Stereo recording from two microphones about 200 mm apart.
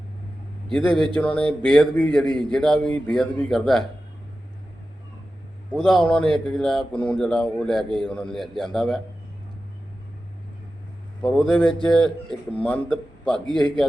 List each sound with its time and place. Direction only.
0.7 s a man's voice: 5° left (ahead or behind)
5.7 s a man's voice: 5° left (ahead or behind)
11.2 s a man's voice: centre (ahead or behind)
13.5 s a man's voice: 25° right (ahead or behind)